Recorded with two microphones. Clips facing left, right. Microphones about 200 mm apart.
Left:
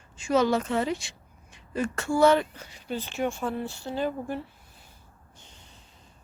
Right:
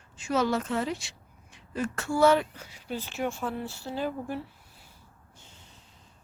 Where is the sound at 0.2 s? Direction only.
Centre (ahead or behind).